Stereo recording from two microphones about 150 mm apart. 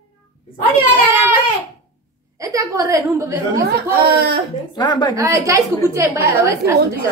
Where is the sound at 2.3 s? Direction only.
20° right (ahead or behind).